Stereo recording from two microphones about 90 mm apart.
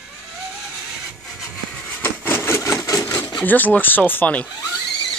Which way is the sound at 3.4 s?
20° left (ahead or behind).